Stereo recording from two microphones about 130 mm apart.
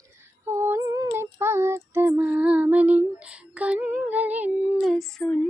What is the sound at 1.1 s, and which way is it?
Child singing, 20° right (ahead or behind).